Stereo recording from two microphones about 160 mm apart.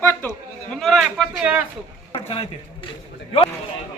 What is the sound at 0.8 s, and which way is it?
Speech, centre (ahead or behind).